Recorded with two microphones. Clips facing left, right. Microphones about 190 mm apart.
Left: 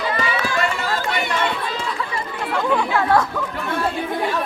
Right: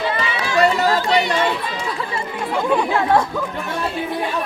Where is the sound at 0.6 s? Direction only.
40° right (ahead or behind).